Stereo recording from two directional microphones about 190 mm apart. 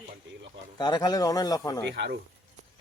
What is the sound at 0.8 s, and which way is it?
Speech, 20° left (ahead or behind).